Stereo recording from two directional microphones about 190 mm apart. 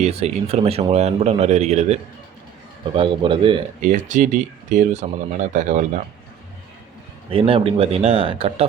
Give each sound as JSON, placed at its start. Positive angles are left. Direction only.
{"t": 0.0, "sound": "speech", "side_deg": -35}
{"t": 3.8, "sound": "speech", "side_deg": -45}
{"t": 7.3, "sound": "speech", "side_deg": -30}